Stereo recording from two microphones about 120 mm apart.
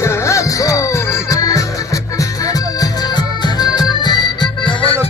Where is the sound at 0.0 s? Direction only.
25° left (ahead or behind).